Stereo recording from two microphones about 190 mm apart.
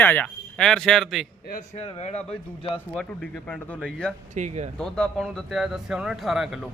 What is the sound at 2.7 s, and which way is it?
A man's voice, 5° left (ahead or behind).